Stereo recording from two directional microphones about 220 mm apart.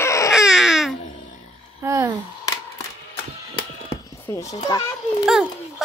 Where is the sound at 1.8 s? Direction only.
15° right (ahead or behind).